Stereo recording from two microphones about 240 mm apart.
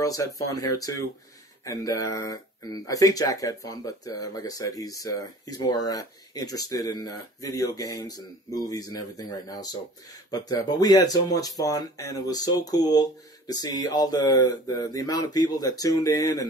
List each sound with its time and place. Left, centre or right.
0.0 s speech: centre